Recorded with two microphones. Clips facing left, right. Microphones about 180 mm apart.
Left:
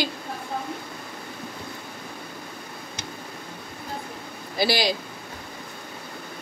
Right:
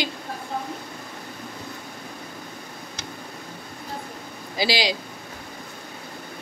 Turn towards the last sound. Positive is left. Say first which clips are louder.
# left 1 dB
turn(degrees=-15)  # may be behind; listen again after turning